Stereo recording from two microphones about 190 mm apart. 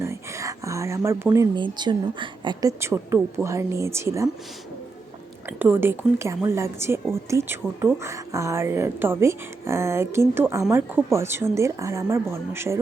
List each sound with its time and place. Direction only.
0.0 s a woman's voice: 15° right (ahead or behind)
5.5 s a woman's voice: 10° right (ahead or behind)